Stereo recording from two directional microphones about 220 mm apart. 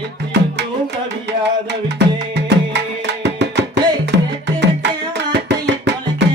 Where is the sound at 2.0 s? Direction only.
50° right (ahead or behind).